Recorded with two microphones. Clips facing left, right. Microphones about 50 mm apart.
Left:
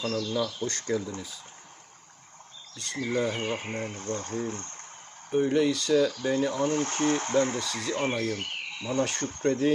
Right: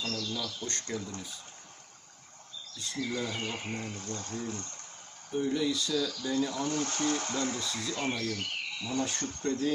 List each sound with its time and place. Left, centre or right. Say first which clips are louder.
0.0 s speech: left 7 dB; centre
2.7 s speech: left 3 dB; left
3.0 s speech: left 6 dB; left
5.5 s speech: left 6 dB; left
6.1 s speech: left 5 dB; left
7.6 s speech: left 4 dB; left
9.4 s speech: left 6 dB; left